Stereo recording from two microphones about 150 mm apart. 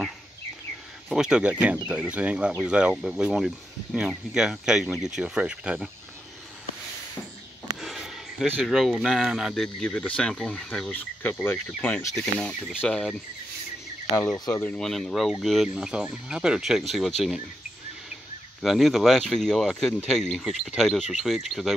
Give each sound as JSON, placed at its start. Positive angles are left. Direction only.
{"t": 1.0, "sound": "speech", "side_deg": -5}
{"t": 7.8, "sound": "speech", "side_deg": 0}
{"t": 14.1, "sound": "speech", "side_deg": 25}
{"t": 14.5, "sound": "speech", "side_deg": 10}
{"t": 18.6, "sound": "speech", "side_deg": 0}